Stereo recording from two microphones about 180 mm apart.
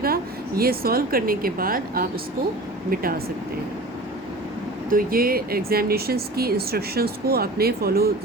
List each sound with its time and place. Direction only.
0.0 s a woman's voice: 55° right (ahead or behind)
4.9 s speech: 55° right (ahead or behind)